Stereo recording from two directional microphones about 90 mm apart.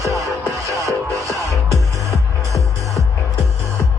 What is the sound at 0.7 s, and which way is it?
Music, 40° right (ahead or behind).